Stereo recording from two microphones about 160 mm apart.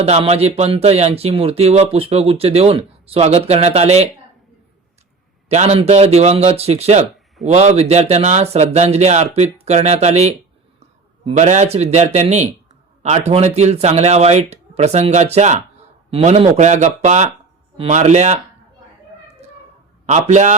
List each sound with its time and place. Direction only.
0.0 s speech: 40° right (ahead or behind)
5.5 s a man's voice: 45° right (ahead or behind)
20.1 s a man's voice: 45° right (ahead or behind)